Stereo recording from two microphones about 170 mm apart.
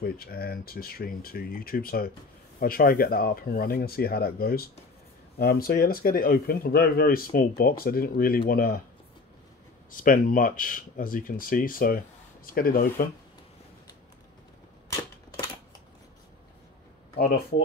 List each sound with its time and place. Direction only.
0.0 s speech: 60° left (ahead or behind)
9.8 s speech: 55° left (ahead or behind)